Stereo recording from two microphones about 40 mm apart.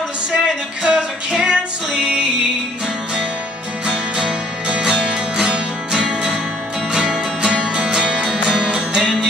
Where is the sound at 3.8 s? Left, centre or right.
Right.